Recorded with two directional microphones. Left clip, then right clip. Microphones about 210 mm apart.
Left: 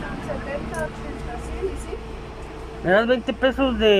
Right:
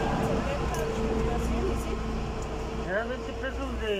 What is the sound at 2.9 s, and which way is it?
Speech, 60° left (ahead or behind).